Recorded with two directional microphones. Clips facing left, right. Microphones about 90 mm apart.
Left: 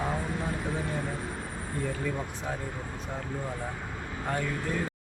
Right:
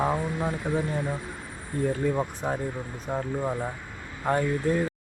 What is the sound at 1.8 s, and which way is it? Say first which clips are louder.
Speech: right 9 dB; 40° right (ahead or behind).